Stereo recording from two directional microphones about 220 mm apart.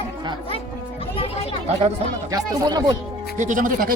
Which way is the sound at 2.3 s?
20° right (ahead or behind).